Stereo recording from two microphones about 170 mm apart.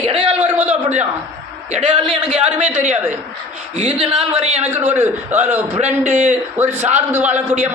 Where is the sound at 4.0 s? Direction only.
35° right (ahead or behind).